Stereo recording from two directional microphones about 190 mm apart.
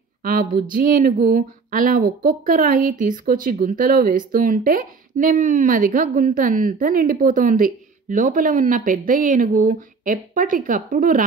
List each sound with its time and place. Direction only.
0.2 s speech: 50° right (ahead or behind)